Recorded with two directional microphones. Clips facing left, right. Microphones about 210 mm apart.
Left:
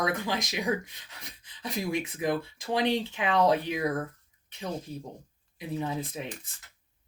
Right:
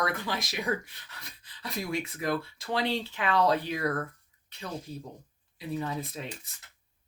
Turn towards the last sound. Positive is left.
turn(degrees=15)  # may be behind; listen again after turning